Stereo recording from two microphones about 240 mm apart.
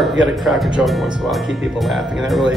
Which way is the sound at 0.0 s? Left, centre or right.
Centre.